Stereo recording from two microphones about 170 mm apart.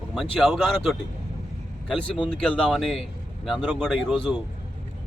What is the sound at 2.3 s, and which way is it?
A man's voice, 5° left (ahead or behind).